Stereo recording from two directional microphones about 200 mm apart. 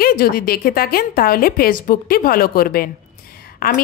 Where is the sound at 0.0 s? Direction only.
50° left (ahead or behind).